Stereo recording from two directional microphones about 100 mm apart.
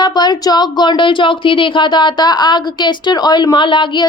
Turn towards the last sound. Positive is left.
turn(degrees=50)  # may be behind; listen again after turning